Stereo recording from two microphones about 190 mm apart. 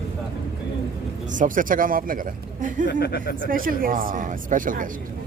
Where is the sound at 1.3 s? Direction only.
45° right (ahead or behind).